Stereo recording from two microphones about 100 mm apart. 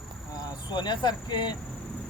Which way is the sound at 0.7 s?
45° left (ahead or behind).